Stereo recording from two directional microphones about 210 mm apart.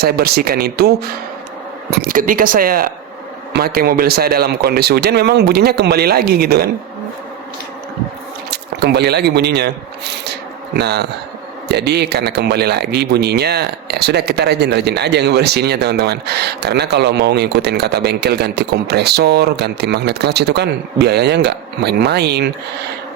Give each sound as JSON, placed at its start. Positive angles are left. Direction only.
{"t": 0.0, "sound": "speech", "side_deg": -45}
{"t": 8.4, "sound": "speech", "side_deg": -50}